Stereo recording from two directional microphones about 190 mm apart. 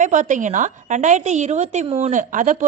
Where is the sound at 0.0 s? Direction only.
40° right (ahead or behind).